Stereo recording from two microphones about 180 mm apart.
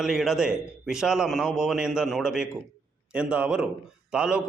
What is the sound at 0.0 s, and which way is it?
A man's voice, centre (ahead or behind).